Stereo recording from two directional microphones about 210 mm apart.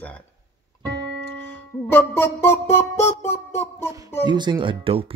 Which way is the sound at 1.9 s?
10° left (ahead or behind).